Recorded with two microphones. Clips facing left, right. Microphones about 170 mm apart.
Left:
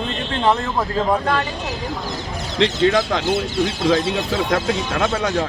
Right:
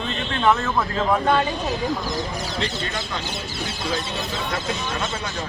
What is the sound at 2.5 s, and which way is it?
A man's voice, 85° left.